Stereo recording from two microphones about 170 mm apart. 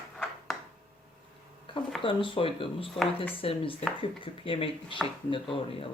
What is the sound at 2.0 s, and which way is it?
Speech, 30° left (ahead or behind).